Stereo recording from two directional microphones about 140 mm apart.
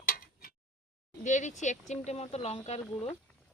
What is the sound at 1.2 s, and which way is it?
Speech, 60° left (ahead or behind).